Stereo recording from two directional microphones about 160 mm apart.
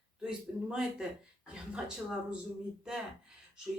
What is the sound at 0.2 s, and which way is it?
Speech, 5° right (ahead or behind).